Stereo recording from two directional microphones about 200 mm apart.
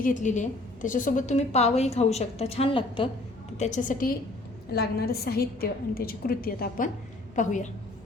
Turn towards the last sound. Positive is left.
turn(degrees=40)  # may be behind; listen again after turning